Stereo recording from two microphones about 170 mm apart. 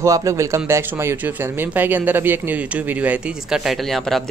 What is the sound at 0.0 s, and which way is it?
Speech, 20° right (ahead or behind).